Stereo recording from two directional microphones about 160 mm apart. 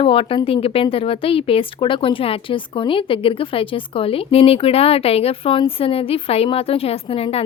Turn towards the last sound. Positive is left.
turn(degrees=35)  # may be behind; listen again after turning